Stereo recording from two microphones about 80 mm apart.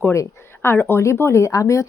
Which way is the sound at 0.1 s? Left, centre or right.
Left.